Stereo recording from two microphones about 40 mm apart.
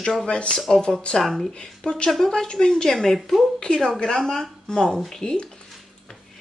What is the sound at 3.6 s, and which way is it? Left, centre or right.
Speech, centre.